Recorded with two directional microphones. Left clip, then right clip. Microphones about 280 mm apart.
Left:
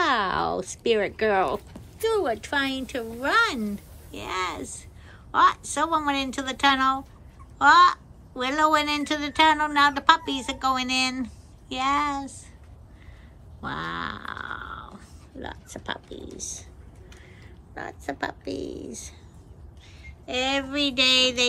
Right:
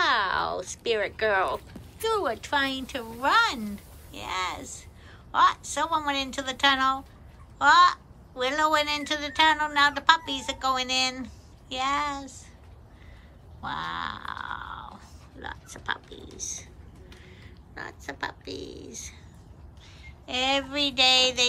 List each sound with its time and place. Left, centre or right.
0.0 s a woman's voice: centre
13.6 s a woman's voice: centre
17.7 s a woman's voice: centre